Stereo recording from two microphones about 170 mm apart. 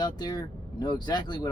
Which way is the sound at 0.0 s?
25° left (ahead or behind).